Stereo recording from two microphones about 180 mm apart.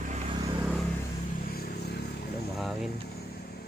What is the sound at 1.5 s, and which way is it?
Vehicle, 60° left (ahead or behind).